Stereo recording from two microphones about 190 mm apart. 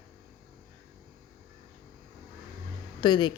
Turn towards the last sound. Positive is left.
turn(degrees=25)  # may be behind; listen again after turning